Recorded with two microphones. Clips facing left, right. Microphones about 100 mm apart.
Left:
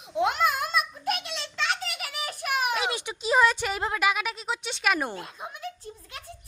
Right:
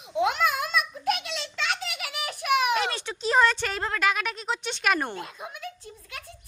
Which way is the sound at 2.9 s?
15° left (ahead or behind).